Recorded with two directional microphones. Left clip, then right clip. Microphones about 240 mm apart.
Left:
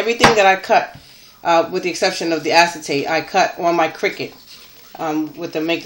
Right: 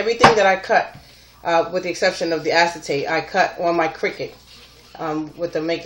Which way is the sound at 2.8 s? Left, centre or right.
Left.